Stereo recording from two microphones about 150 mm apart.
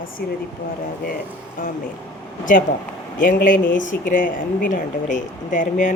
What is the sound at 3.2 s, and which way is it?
Speech, 60° left (ahead or behind).